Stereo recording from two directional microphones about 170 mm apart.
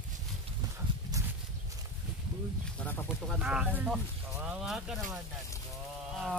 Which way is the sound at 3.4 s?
5° right (ahead or behind).